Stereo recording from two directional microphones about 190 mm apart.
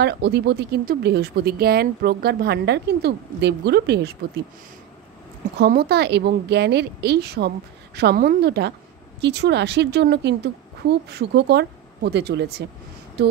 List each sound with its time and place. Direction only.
0.0 s speech: 60° right (ahead or behind)
5.6 s speech: 55° right (ahead or behind)